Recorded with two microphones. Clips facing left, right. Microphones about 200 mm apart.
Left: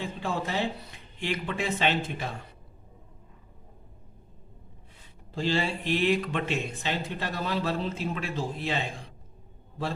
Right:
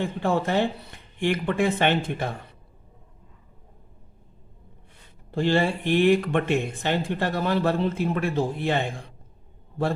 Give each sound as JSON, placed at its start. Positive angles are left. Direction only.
{"t": 0.0, "sound": "speech", "side_deg": -60}
{"t": 5.3, "sound": "speech", "side_deg": -55}